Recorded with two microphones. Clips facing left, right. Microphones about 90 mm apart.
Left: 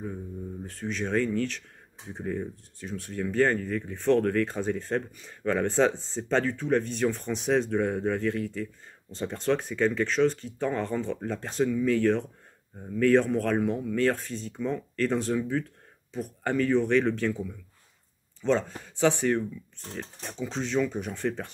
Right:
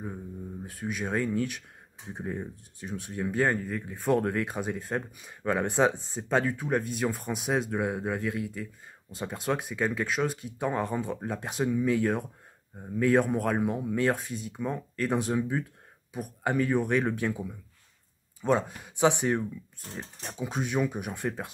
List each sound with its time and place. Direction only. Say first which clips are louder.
0.7 s speech: left 1 dB; 10° right (ahead or behind)